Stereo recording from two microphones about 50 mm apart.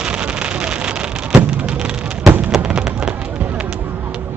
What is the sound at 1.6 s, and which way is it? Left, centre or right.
Fireworks, centre.